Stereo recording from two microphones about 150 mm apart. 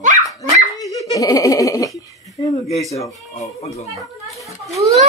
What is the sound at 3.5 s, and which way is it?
Speech, 45° left (ahead or behind).